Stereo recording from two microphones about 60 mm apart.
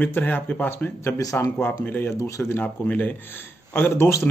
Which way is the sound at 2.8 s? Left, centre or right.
Left.